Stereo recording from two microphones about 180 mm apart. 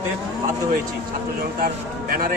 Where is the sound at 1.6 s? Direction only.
55° right (ahead or behind).